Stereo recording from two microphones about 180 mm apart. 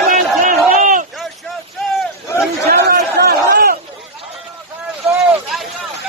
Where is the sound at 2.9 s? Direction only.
60° right (ahead or behind).